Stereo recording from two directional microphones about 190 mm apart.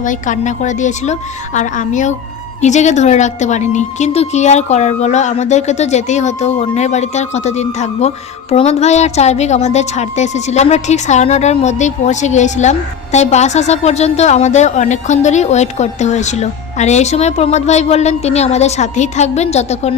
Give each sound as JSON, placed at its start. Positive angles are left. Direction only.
{"t": 0.0, "sound": "a woman's voice", "side_deg": 40}